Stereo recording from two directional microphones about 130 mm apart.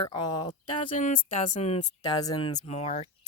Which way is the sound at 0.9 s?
80° left.